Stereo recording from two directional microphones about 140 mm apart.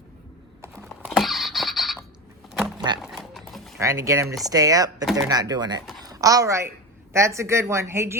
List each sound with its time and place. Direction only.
0.9 s a sound: centre (ahead or behind)
2.7 s horse: 30° right (ahead or behind)
3.0 s horse: centre (ahead or behind)
3.8 s a woman's voice: 20° right (ahead or behind)